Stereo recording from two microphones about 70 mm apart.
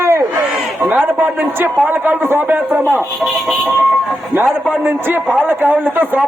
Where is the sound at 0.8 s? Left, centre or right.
Right.